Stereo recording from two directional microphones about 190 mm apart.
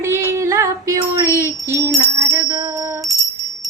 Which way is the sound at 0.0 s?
15° right (ahead or behind).